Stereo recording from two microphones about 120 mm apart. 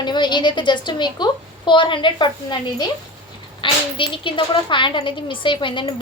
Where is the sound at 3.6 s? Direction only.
45° left (ahead or behind).